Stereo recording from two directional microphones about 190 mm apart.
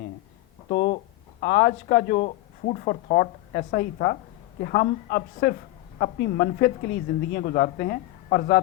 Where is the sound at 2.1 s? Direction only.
40° left (ahead or behind).